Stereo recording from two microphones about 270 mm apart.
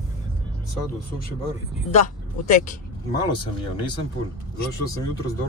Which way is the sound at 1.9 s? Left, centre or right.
Left.